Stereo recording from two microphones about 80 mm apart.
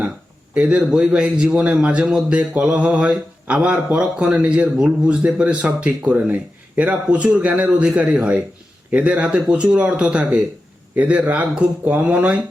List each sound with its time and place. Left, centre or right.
0.5 s a man's voice: centre